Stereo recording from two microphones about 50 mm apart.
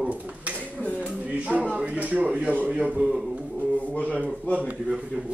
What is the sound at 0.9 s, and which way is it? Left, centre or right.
Speech, right.